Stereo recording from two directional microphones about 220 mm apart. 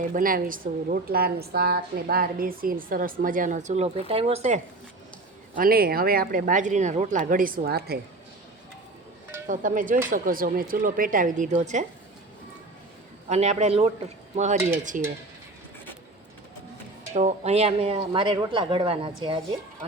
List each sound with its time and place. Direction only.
0.0 s a woman's voice: 40° right (ahead or behind)
5.5 s a woman's voice: 40° right (ahead or behind)
9.5 s a woman's voice: 35° right (ahead or behind)
13.2 s a woman's voice: 30° right (ahead or behind)
17.2 s speech: 30° right (ahead or behind)